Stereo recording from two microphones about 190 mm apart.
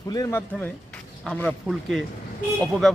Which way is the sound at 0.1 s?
15° left (ahead or behind).